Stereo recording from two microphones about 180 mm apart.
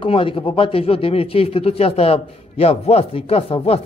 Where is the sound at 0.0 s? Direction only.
30° left (ahead or behind).